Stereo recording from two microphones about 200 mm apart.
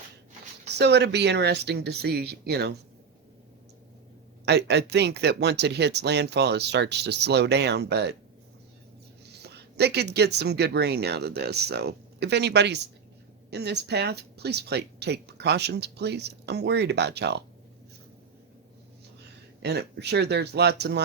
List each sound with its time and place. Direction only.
0.8 s speech: 55° right (ahead or behind)
4.4 s speech: 55° right (ahead or behind)
9.3 s speech: 55° right (ahead or behind)
19.6 s speech: 55° right (ahead or behind)